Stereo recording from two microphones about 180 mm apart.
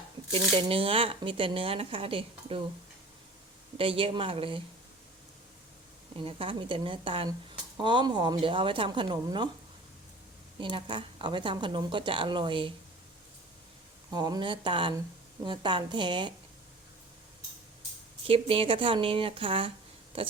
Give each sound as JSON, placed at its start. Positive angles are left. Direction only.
{"t": 0.3, "sound": "speech", "side_deg": -30}
{"t": 3.8, "sound": "speech", "side_deg": -30}
{"t": 6.2, "sound": "speech", "side_deg": -30}
{"t": 10.6, "sound": "speech", "side_deg": -25}
{"t": 14.1, "sound": "speech", "side_deg": -25}
{"t": 18.3, "sound": "speech", "side_deg": -30}